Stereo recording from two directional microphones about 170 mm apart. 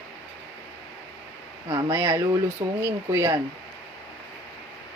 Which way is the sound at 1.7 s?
30° right (ahead or behind).